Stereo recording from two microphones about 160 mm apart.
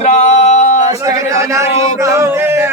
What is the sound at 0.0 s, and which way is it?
Male singing, 45° left (ahead or behind).